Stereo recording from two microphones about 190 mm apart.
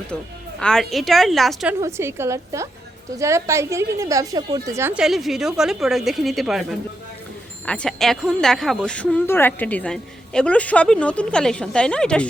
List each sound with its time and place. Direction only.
0.6 s speech: centre (ahead or behind)
1.8 s a woman's voice: 15° right (ahead or behind); by 12.2 s 5° left (ahead or behind)